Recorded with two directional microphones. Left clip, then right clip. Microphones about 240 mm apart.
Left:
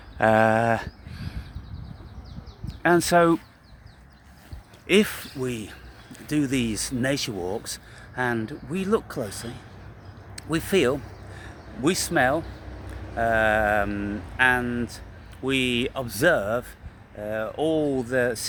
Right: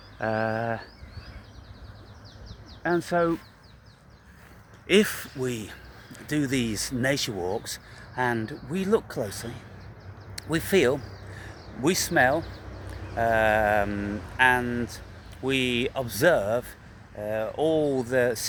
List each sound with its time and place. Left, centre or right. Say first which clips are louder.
0.2 s speech: left 8 dB; left
2.8 s speech: left 6 dB; left
4.9 s speech: left 1 dB; centre
10.3 s a sound: even; centre
13.1 s speech: left 1 dB; centre